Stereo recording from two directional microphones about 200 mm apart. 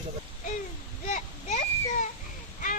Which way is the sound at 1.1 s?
40° left (ahead or behind).